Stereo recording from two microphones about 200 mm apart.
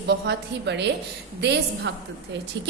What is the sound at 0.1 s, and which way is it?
A woman's voice, 60° right (ahead or behind).